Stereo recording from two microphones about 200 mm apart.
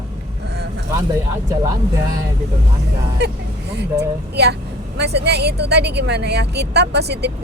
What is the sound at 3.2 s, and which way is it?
A woman's voice, 55° right (ahead or behind).